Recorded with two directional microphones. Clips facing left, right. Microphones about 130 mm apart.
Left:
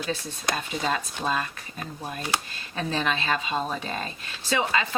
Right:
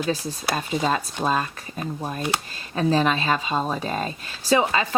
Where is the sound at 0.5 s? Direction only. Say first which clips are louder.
Right 5 dB; 35° right (ahead or behind).